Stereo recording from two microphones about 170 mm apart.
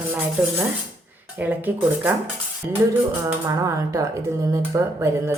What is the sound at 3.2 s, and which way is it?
Speech, 20° right (ahead or behind).